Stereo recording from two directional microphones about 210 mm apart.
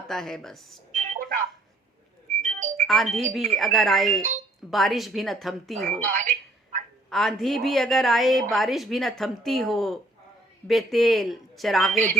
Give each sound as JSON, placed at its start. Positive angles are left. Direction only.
{"t": 0.1, "sound": "a woman's voice", "side_deg": 0}
{"t": 0.9, "sound": "a sound", "side_deg": -35}
{"t": 2.4, "sound": "music", "side_deg": -35}
{"t": 2.8, "sound": "a woman's voice", "side_deg": 0}
{"t": 6.1, "sound": "telephone", "side_deg": -35}
{"t": 7.1, "sound": "a woman's voice", "side_deg": 0}